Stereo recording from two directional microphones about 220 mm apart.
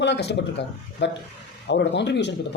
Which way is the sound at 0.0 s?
50° left (ahead or behind).